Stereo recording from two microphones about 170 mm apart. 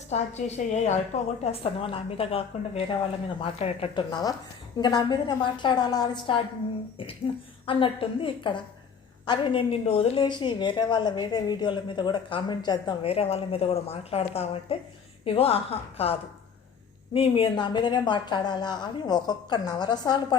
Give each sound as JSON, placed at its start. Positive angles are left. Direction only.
{"t": 0.1, "sound": "a woman's voice", "side_deg": 40}
{"t": 7.7, "sound": "a woman's voice", "side_deg": 30}
{"t": 17.2, "sound": "a woman's voice", "side_deg": 30}